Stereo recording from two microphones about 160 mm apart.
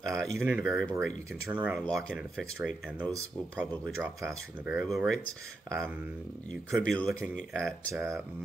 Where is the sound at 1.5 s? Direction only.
10° right (ahead or behind).